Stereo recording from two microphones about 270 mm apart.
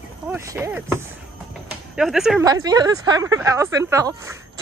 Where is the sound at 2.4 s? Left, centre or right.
Centre.